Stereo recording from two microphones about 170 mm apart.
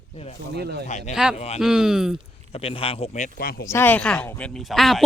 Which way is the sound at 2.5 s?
35° left (ahead or behind).